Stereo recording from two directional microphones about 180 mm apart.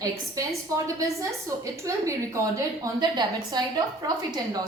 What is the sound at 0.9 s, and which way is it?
A woman's voice, 15° right (ahead or behind).